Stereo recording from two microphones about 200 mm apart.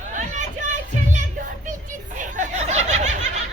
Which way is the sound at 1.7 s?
40° right (ahead or behind).